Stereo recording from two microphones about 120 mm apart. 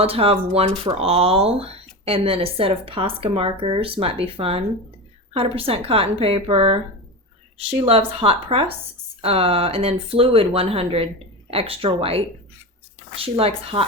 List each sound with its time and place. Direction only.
0.0 s speech: 55° right (ahead or behind)